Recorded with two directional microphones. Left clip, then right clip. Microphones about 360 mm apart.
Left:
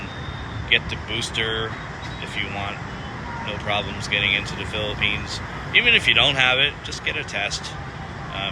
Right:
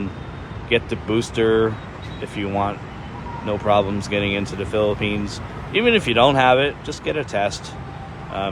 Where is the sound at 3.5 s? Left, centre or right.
Centre.